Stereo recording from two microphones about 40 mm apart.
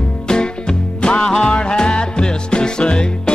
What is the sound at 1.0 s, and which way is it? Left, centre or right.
Music, left.